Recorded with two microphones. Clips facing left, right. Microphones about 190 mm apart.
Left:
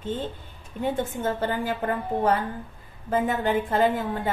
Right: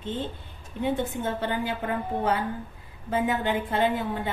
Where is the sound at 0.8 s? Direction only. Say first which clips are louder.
Even; 45° left (ahead or behind).